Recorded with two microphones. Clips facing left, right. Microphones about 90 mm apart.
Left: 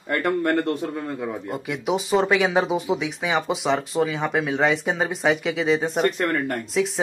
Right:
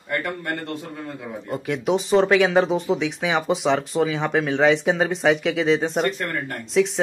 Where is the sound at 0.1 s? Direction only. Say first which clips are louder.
Left 5 dB; 55° left (ahead or behind).